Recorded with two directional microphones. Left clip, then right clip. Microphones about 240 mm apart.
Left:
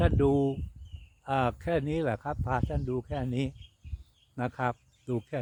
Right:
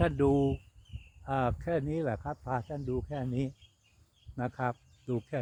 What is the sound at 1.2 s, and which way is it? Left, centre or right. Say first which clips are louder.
Speech: left 3 dB; centre.